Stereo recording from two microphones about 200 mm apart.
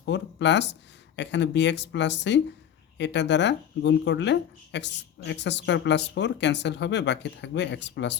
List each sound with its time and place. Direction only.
0.0 s speech: 60° left (ahead or behind)